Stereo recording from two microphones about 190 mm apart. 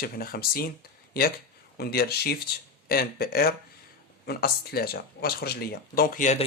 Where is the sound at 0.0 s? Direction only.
50° left (ahead or behind).